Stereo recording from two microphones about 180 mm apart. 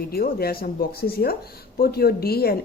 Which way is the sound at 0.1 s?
60° left (ahead or behind).